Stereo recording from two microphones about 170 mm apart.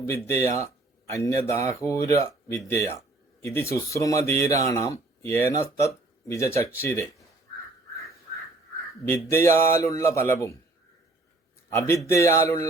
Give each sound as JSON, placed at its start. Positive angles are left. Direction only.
{"t": 0.0, "sound": "speech", "side_deg": 15}
{"t": 9.0, "sound": "speech", "side_deg": 15}
{"t": 11.7, "sound": "speech", "side_deg": 15}